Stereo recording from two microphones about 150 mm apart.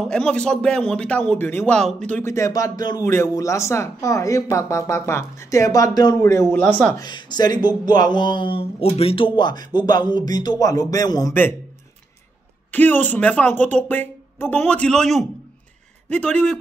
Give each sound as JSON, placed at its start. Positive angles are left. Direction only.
{"t": 0.1, "sound": "speech", "side_deg": 5}
{"t": 6.6, "sound": "speech", "side_deg": 10}
{"t": 7.0, "sound": "speech", "side_deg": 30}
{"t": 12.7, "sound": "speech", "side_deg": 10}